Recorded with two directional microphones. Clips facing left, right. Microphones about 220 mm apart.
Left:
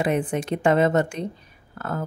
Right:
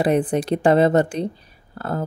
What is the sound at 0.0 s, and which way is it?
Speech, 35° right (ahead or behind).